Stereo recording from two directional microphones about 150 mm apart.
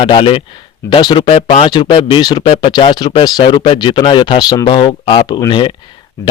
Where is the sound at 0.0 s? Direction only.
35° left (ahead or behind).